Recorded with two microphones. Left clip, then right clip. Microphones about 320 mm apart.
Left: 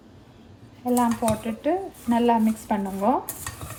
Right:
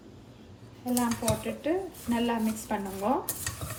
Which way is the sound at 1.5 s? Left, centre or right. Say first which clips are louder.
Left 5 dB; left.